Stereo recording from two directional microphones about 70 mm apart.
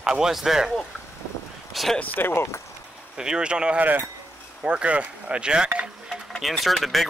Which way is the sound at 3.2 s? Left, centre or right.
Centre.